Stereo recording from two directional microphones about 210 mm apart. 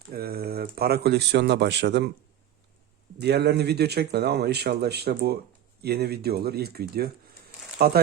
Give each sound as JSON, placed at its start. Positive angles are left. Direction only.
{"t": 0.1, "sound": "a sound", "side_deg": -45}
{"t": 0.8, "sound": "speech", "side_deg": -50}
{"t": 3.2, "sound": "speech", "side_deg": -50}